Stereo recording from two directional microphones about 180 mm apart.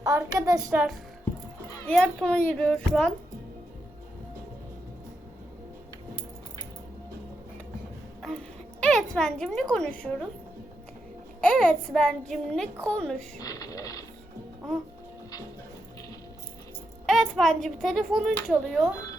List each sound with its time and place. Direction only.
0.0 s a child's voice: 15° right (ahead or behind)
0.7 s a child's voice: 5° right (ahead or behind)
1.9 s speech: 5° left (ahead or behind)
8.2 s a sound: 5° left (ahead or behind)
9.1 s a woman's voice: 5° left (ahead or behind)
11.3 s speech: 5° left (ahead or behind)
13.4 s speech: 20° left (ahead or behind)
17.1 s speech: centre (ahead or behind)